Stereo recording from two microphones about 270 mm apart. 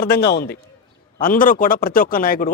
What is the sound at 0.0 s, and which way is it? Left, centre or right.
Speech, left.